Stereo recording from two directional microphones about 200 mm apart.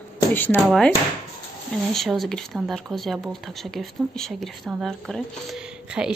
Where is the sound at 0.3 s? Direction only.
10° left (ahead or behind).